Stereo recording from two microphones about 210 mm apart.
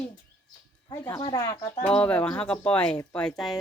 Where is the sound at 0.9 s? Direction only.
15° left (ahead or behind).